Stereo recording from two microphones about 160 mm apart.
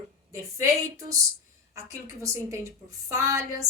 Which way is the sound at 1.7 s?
20° right (ahead or behind).